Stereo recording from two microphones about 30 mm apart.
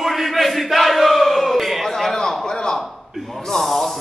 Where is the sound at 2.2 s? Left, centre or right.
Left.